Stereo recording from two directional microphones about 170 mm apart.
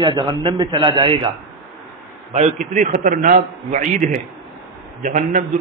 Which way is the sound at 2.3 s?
45° right (ahead or behind).